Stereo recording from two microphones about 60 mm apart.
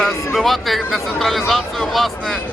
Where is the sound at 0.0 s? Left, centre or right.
Centre.